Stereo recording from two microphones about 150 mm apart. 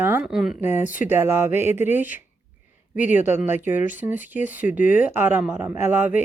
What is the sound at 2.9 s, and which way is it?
Speech, 55° left (ahead or behind).